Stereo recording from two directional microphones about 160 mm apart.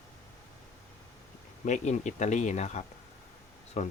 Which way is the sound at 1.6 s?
50° left (ahead or behind).